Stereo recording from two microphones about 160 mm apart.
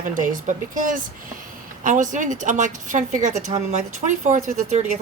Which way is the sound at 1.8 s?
55° right (ahead or behind).